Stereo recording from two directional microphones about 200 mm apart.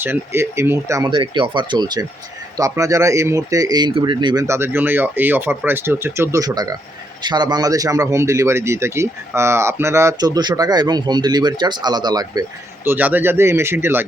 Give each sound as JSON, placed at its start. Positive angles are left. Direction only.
{"t": 0.0, "sound": "a man's voice", "side_deg": -10}